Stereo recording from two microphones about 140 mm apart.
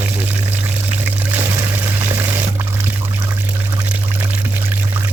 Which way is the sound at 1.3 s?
15° right (ahead or behind).